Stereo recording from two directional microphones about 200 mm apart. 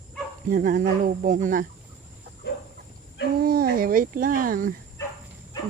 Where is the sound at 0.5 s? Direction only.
45° right (ahead or behind).